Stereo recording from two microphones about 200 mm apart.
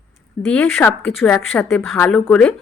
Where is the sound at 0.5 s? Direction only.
5° left (ahead or behind).